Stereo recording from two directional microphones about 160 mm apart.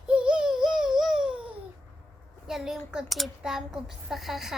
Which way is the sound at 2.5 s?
Centre (ahead or behind).